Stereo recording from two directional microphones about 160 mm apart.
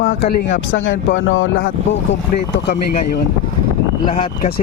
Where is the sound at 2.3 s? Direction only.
65° left (ahead or behind).